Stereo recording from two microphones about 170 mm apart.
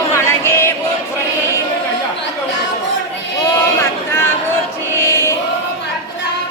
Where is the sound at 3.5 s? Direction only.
15° left (ahead or behind).